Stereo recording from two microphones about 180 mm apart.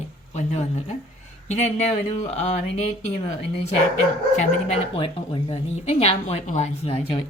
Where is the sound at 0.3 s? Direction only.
40° left (ahead or behind).